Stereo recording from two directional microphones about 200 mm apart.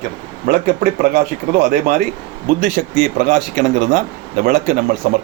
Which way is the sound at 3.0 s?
40° right (ahead or behind).